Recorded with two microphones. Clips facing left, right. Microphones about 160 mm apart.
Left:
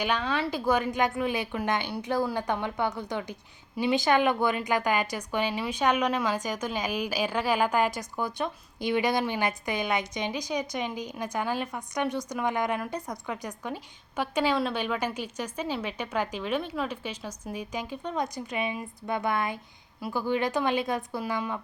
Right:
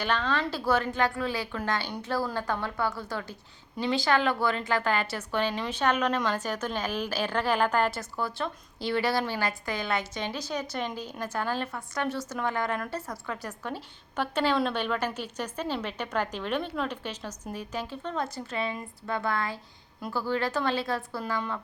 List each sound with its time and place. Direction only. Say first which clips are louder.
0.0 s a woman's voice: even; 10° left (ahead or behind)